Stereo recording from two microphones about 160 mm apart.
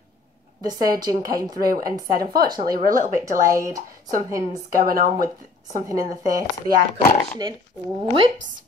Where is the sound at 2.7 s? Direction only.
60° right (ahead or behind).